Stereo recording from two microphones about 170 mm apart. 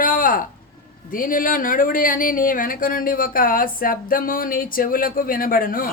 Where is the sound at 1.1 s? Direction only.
55° left (ahead or behind).